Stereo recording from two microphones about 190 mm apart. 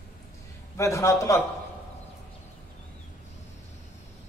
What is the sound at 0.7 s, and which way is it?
Speech, 15° left (ahead or behind).